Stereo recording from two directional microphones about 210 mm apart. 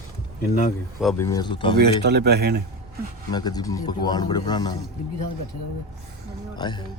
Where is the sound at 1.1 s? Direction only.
15° left (ahead or behind).